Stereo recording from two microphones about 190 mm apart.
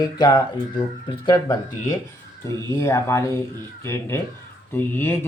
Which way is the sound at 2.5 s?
15° left (ahead or behind).